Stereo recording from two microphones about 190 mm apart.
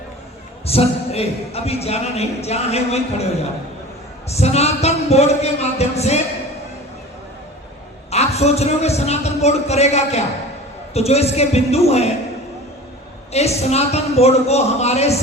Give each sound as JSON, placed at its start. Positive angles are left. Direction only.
{"t": 0.6, "sound": "a man's voice", "side_deg": 30}
{"t": 4.3, "sound": "a man's voice", "side_deg": 35}
{"t": 8.1, "sound": "a man's voice", "side_deg": 35}
{"t": 13.3, "sound": "a man's voice", "side_deg": 35}